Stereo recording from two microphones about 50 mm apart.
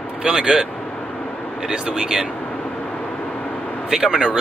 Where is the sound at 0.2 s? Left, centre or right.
Centre.